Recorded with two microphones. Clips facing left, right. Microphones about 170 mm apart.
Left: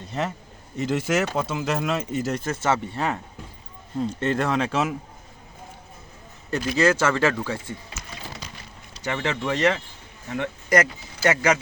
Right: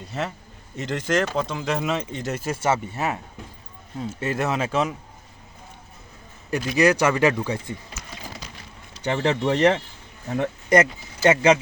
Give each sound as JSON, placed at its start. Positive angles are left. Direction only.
{"t": 0.1, "sound": "speech", "side_deg": 0}
{"t": 6.5, "sound": "speech", "side_deg": -15}
{"t": 9.0, "sound": "speech", "side_deg": -35}
{"t": 10.8, "sound": "speech", "side_deg": -25}